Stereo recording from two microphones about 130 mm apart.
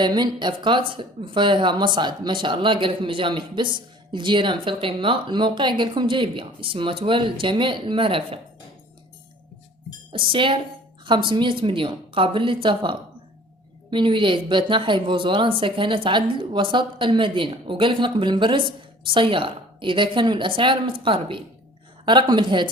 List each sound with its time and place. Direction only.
0.0 s speech: 35° right (ahead or behind)
10.1 s speech: 40° right (ahead or behind)